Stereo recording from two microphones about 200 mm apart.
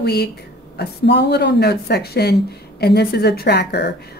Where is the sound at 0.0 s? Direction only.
55° left (ahead or behind).